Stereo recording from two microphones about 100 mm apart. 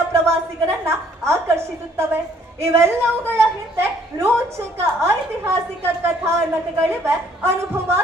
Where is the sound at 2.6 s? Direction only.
25° right (ahead or behind).